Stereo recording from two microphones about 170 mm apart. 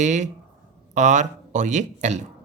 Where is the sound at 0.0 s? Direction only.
45° right (ahead or behind).